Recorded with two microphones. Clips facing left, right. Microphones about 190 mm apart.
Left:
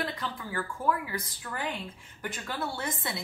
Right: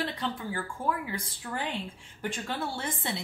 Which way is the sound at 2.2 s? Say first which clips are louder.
Right 2 dB; 30° right (ahead or behind).